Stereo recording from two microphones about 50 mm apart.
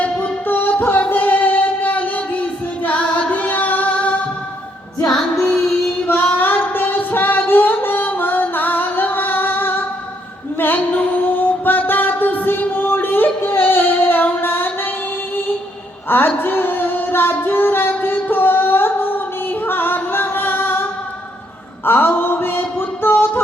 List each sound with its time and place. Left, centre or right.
0.0 s music: left
3.3 s music: left
5.0 s music: centre
6.1 s a sound: left
10.6 s music: left
16.0 s female singing: left
19.6 s music: left
21.8 s a sound: left